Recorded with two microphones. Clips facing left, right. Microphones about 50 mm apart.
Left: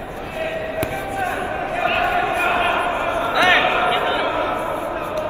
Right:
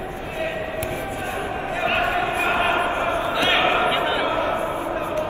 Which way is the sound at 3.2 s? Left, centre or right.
Left.